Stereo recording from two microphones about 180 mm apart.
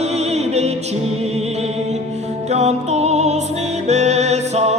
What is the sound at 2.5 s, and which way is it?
Music, 40° right (ahead or behind).